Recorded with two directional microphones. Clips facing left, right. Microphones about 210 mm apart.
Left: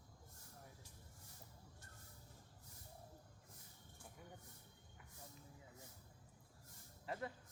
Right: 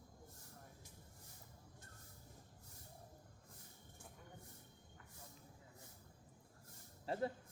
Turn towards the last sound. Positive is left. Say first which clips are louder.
# right 5 dB
turn(degrees=-30)  # may be behind; listen again after turning